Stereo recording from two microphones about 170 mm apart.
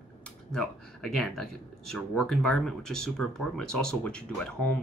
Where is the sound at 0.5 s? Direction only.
5° left (ahead or behind).